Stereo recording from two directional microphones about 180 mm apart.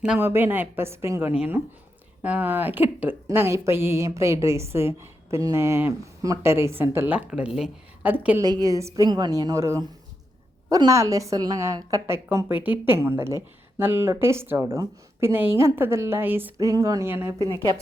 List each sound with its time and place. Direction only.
0.0 s a woman's voice: 10° right (ahead or behind)
8.4 s a woman's voice: 20° right (ahead or behind)
17.3 s speech: 20° left (ahead or behind)